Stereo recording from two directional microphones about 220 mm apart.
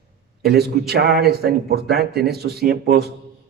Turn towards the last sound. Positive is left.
turn(degrees=-45)  # may be behind; listen again after turning